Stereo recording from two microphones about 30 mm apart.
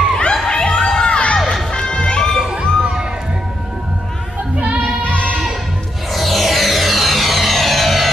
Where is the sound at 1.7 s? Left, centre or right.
Left.